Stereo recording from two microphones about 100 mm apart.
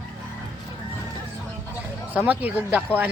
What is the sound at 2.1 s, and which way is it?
Speech, 15° right (ahead or behind).